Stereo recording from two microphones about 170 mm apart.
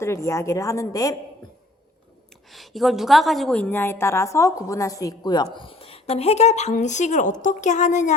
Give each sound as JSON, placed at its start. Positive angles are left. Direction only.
{"t": 0.0, "sound": "a woman's voice", "side_deg": 15}
{"t": 2.5, "sound": "a woman's voice", "side_deg": 0}